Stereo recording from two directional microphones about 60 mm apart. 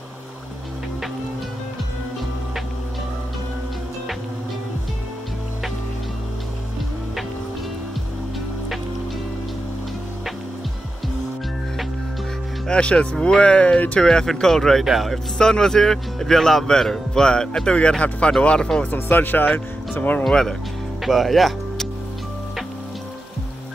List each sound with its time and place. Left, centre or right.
12.6 s a man's voice: centre
14.0 s a man's voice: centre
15.3 s a man's voice: centre
18.9 s speech: left
20.2 s a man's voice: centre
21.0 s music: centre